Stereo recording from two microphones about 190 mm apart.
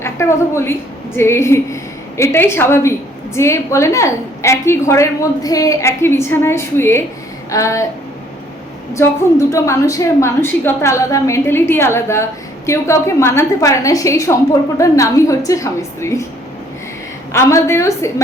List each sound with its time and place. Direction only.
0.0 s a woman's voice: 15° left (ahead or behind)
9.5 s a woman's voice: 15° left (ahead or behind)
17.3 s a woman's voice: 15° left (ahead or behind)